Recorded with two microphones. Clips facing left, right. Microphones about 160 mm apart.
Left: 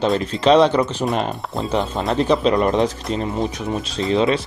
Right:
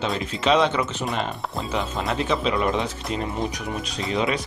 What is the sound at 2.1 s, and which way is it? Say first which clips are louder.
Speech: left 8 dB; 40° left (ahead or behind).